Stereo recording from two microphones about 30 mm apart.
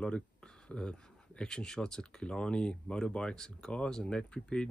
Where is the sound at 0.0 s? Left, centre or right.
Left.